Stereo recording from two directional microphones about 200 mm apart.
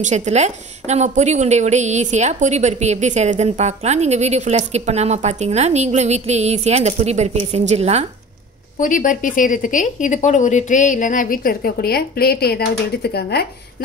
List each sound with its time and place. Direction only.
0.0 s a woman's voice: 35° right (ahead or behind)
8.7 s a woman's voice: 40° left (ahead or behind)